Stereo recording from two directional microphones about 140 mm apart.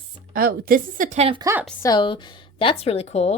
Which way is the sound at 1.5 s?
25° right (ahead or behind).